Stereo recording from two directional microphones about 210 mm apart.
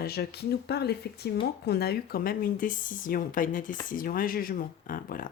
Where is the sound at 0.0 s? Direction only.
50° left (ahead or behind).